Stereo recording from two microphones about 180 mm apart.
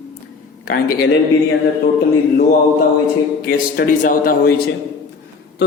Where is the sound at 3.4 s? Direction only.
55° left (ahead or behind).